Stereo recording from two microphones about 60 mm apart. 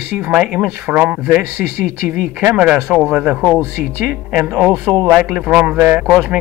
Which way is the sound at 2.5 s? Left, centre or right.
Right.